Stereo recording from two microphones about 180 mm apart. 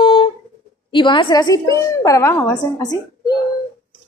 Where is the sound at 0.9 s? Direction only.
25° left (ahead or behind).